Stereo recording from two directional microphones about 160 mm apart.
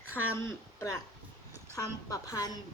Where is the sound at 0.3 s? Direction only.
15° left (ahead or behind).